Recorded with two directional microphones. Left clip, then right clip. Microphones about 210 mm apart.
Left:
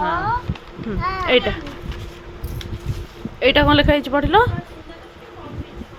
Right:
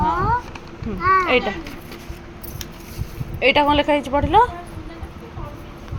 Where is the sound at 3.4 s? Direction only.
25° left (ahead or behind).